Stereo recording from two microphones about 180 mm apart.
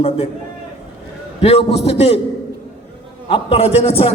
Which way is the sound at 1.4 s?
35° left (ahead or behind).